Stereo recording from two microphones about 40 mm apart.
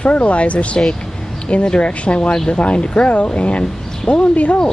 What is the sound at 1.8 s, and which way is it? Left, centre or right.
Speech, left.